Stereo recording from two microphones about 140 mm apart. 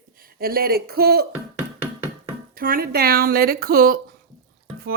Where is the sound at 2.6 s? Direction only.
90° right.